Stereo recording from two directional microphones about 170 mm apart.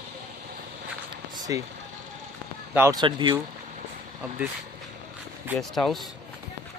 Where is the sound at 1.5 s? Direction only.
20° right (ahead or behind).